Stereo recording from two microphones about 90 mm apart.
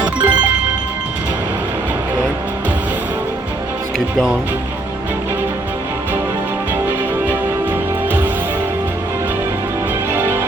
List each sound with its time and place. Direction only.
0.0 s music: 15° right (ahead or behind)
10.1 s music: 25° right (ahead or behind)